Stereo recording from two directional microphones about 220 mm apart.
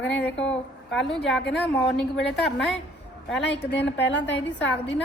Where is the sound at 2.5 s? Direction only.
Centre (ahead or behind).